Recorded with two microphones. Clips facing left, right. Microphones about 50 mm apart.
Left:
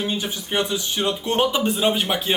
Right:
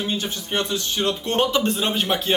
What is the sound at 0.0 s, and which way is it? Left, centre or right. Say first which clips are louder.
A woman's voice: even; centre.